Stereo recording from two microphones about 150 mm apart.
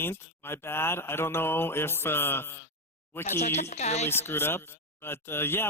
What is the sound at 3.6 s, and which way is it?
Speech, 50° left (ahead or behind).